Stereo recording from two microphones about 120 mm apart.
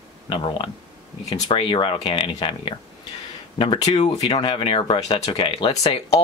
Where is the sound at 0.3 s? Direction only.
50° left (ahead or behind).